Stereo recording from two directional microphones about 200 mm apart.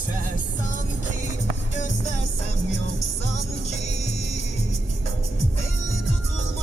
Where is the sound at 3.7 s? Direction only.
35° left (ahead or behind).